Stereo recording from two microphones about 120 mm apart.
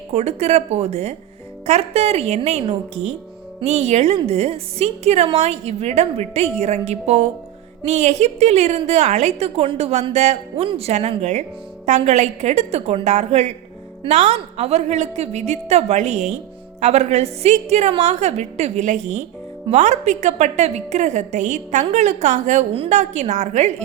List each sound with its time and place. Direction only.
0.1 s a woman's voice: 65° right (ahead or behind)